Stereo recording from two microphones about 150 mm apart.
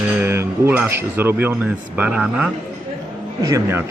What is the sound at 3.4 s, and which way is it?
Speech, 20° right (ahead or behind).